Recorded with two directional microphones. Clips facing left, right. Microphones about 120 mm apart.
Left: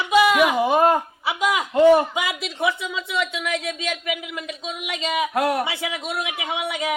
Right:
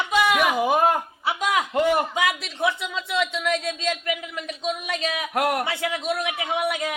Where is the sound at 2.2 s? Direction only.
Centre (ahead or behind).